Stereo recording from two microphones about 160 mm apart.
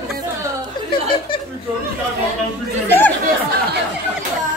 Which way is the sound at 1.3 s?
30° left (ahead or behind).